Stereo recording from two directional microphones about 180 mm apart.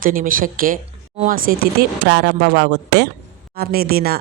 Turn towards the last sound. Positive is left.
turn(degrees=-55)  # may be behind; listen again after turning